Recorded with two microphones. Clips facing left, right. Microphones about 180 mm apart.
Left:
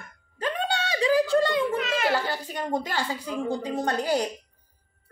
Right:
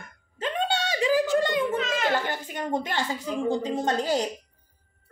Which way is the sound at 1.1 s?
15° right (ahead or behind).